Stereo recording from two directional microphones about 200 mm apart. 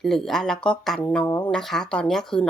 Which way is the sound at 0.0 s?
Centre (ahead or behind).